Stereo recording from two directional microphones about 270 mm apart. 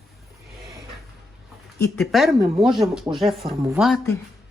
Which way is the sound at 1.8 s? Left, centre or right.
Centre.